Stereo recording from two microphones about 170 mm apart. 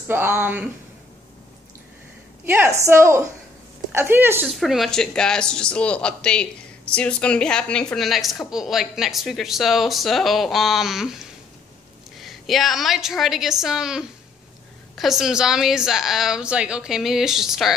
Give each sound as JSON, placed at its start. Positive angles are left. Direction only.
{"t": 0.1, "sound": "a woman's voice", "side_deg": -10}
{"t": 2.5, "sound": "a woman's voice", "side_deg": -15}
{"t": 4.5, "sound": "speech", "side_deg": 0}